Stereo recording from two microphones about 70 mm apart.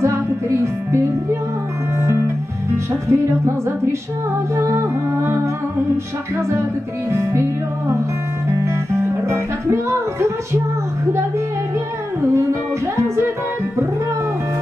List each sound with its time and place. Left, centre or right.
0.0 s music: right
7.1 s music: right
8.5 s music: right
12.4 s music: right